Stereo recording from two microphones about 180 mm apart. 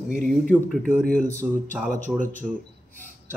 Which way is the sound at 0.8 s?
50° right (ahead or behind).